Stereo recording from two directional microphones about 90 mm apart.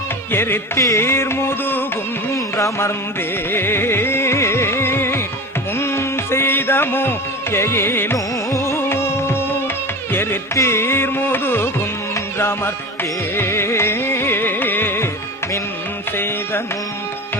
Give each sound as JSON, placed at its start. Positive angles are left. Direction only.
{"t": 0.3, "sound": "carnatic music", "side_deg": 25}
{"t": 3.5, "sound": "music", "side_deg": 25}
{"t": 10.1, "sound": "carnatic music", "side_deg": 25}
{"t": 13.3, "sound": "music", "side_deg": 25}
{"t": 16.1, "sound": "music", "side_deg": 25}